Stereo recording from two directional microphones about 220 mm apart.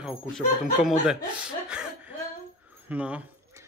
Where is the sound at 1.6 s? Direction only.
5° right (ahead or behind).